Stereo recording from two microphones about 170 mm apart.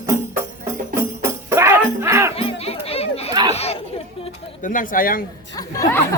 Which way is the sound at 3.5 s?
35° left (ahead or behind).